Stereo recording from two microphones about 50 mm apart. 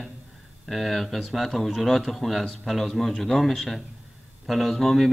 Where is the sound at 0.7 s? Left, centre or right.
Centre.